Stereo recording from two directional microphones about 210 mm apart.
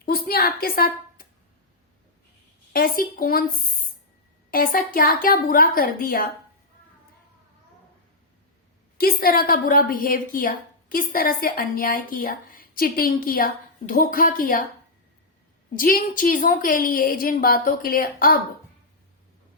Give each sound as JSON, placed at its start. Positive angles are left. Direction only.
{"t": 0.0, "sound": "a sound", "side_deg": 45}
{"t": 2.7, "sound": "a woman's voice", "side_deg": 45}
{"t": 9.0, "sound": "a woman's voice", "side_deg": 45}
{"t": 15.7, "sound": "a woman's voice", "side_deg": 40}